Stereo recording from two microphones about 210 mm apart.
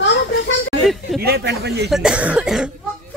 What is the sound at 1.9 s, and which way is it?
Speech, 5° right (ahead or behind).